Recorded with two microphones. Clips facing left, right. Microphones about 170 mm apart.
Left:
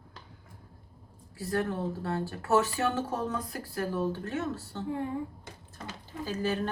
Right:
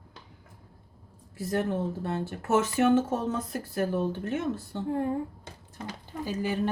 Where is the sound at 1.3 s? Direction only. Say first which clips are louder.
Right 2 dB; 20° right (ahead or behind).